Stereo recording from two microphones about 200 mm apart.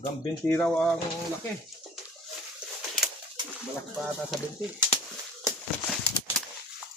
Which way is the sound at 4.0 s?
Centre (ahead or behind).